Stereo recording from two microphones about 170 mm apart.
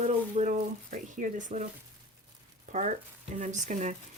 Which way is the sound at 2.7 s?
45° right (ahead or behind).